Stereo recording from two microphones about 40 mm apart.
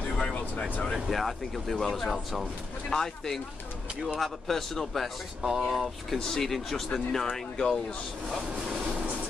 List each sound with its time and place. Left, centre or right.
0.2 s vehicle: centre
1.1 s speech: centre
5.4 s speech: centre
6.1 s speech: centre
8.8 s train: right